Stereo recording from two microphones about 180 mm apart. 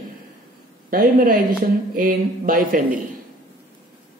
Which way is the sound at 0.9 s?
50° right (ahead or behind).